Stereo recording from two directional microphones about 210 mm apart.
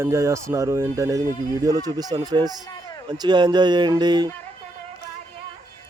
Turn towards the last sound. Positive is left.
turn(degrees=-20)  # may be behind; listen again after turning